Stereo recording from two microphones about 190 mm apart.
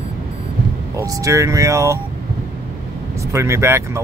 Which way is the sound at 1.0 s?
15° right (ahead or behind).